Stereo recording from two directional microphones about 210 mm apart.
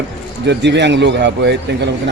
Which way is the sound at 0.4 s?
55° right (ahead or behind).